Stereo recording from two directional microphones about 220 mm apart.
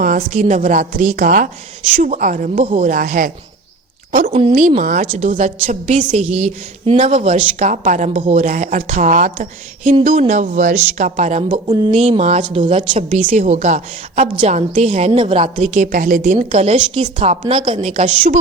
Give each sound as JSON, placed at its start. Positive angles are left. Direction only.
{"t": 0.0, "sound": "a woman's voice", "side_deg": -40}
{"t": 4.3, "sound": "a woman's voice", "side_deg": -25}